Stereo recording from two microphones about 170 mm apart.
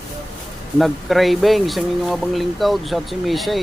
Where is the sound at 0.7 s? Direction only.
Centre (ahead or behind).